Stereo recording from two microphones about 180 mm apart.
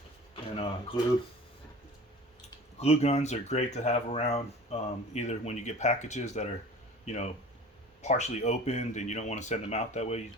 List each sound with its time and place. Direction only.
0.3 s speech: 30° left (ahead or behind)
2.7 s speech: 35° left (ahead or behind)